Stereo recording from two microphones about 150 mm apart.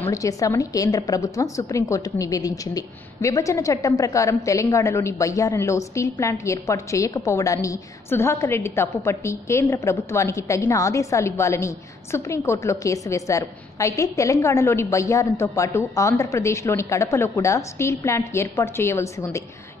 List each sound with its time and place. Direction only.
0.1 s a woman's voice: 20° left (ahead or behind)